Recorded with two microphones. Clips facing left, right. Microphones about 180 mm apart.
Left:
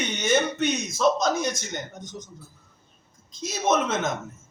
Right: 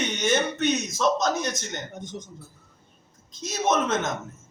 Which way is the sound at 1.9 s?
55° right (ahead or behind).